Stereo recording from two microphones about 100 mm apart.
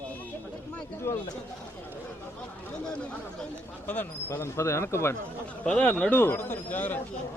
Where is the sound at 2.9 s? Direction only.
10° left (ahead or behind); by 5.2 s 25° left (ahead or behind).